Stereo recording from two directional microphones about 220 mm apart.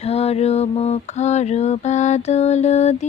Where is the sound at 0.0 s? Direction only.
25° left (ahead or behind).